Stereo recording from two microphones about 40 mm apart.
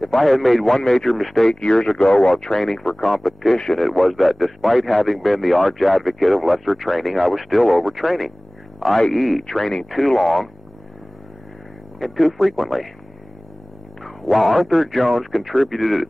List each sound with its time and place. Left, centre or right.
0.0 s a man's voice: centre
1.5 s speech: centre
2.3 s a man's voice: centre
12.0 s a man's voice: centre
14.0 s a man's voice: centre